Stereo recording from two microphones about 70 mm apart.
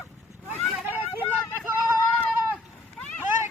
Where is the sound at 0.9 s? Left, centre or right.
Right.